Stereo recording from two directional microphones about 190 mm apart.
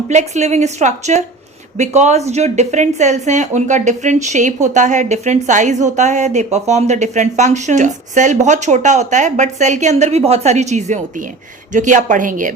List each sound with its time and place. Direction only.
0.1 s a woman's voice: 35° right (ahead or behind)